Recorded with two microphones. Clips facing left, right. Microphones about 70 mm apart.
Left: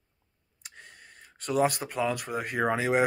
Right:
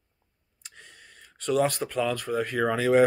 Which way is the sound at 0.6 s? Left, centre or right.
Centre.